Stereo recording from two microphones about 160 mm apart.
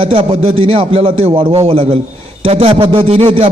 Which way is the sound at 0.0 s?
35° right (ahead or behind).